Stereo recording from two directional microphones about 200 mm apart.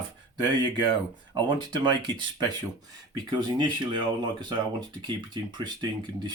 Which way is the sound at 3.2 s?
20° right (ahead or behind).